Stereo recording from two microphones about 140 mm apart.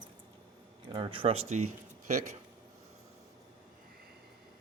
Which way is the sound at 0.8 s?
35° right (ahead or behind).